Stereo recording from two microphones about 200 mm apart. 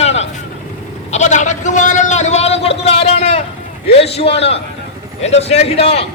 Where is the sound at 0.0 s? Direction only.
30° left (ahead or behind).